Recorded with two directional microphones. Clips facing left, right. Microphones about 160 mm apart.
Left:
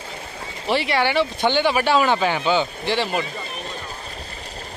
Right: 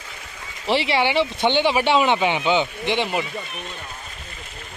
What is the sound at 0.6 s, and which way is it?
Speech, 25° right (ahead or behind).